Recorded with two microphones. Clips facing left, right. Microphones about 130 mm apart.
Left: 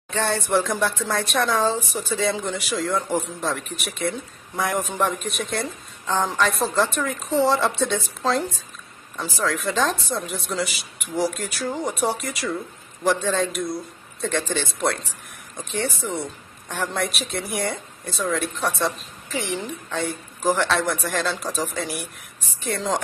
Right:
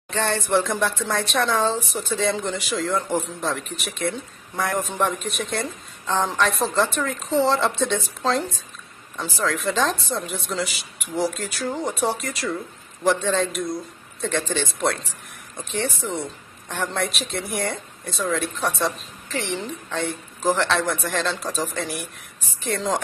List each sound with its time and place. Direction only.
0.1 s speech: 5° left (ahead or behind)